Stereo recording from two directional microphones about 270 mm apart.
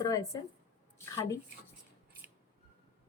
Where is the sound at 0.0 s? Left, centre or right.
Centre.